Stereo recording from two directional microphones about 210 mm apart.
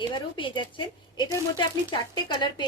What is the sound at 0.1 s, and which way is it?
Speech, 25° left (ahead or behind).